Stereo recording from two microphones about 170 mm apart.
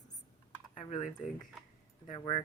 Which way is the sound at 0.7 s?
45° left (ahead or behind).